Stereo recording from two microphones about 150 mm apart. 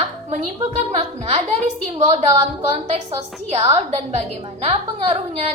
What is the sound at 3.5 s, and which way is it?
A woman's voice, 50° right (ahead or behind).